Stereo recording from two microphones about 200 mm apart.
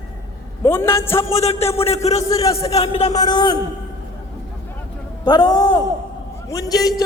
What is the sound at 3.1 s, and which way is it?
Speech, 20° left (ahead or behind).